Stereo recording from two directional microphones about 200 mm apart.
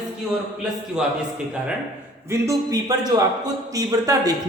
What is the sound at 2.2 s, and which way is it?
A man's voice, 15° right (ahead or behind).